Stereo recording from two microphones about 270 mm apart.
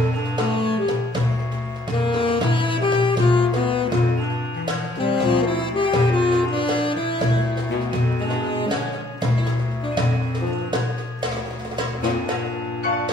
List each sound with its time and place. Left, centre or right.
2.0 s music: centre
5.0 s music: centre